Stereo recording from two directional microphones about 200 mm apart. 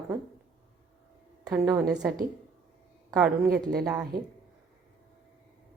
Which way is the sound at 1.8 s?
5° right (ahead or behind).